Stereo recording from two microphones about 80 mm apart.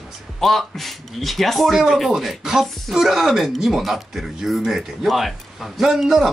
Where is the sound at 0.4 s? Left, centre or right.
Centre.